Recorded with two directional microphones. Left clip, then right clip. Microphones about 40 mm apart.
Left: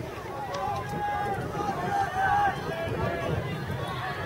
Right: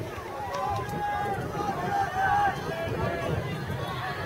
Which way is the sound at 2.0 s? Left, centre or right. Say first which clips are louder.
Even; centre.